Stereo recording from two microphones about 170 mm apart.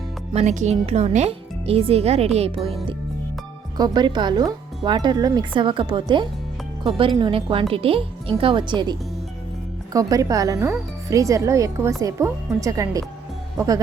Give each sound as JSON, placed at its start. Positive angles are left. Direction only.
{"t": 0.3, "sound": "speech", "side_deg": -45}
{"t": 3.8, "sound": "speech", "side_deg": -25}